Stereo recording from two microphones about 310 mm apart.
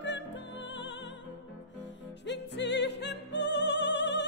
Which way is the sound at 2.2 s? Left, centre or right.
Left.